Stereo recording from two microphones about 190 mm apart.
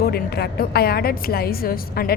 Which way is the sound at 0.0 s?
55° left (ahead or behind).